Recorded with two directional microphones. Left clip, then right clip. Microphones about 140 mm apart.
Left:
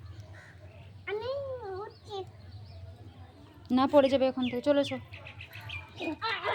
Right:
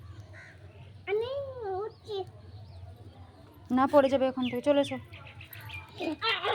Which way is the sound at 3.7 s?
Centre (ahead or behind).